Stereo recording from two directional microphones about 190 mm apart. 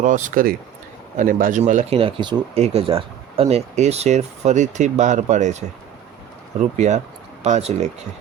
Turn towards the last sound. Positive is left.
turn(degrees=-35)  # may be behind; listen again after turning